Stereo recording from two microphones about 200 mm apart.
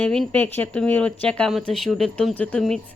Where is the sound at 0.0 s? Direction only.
5° left (ahead or behind).